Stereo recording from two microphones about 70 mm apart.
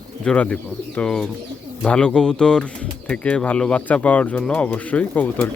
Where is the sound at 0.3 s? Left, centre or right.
Centre.